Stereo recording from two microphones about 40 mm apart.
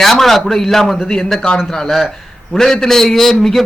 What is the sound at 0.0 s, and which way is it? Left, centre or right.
Speech, centre.